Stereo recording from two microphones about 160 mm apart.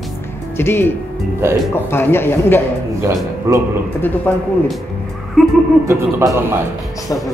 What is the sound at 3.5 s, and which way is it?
Speech, 20° right (ahead or behind).